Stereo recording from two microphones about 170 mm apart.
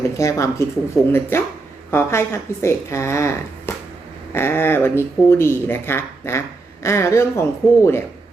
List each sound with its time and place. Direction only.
0.2 s speech: 20° left (ahead or behind)